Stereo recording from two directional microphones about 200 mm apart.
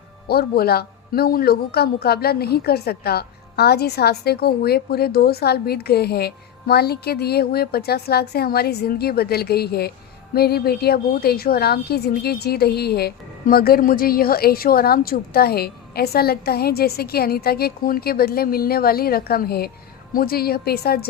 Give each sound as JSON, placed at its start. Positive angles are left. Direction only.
{"t": 0.3, "sound": "speech", "side_deg": 50}